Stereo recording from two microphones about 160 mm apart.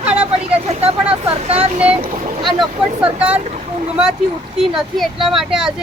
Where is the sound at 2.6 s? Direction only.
5° right (ahead or behind).